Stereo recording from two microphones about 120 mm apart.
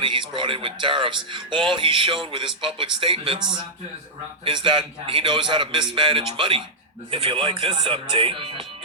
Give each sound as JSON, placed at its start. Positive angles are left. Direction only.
{"t": 0.0, "sound": "speech", "side_deg": -40}